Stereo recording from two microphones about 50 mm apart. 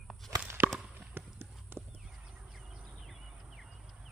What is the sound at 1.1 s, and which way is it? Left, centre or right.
Clip-clop, right.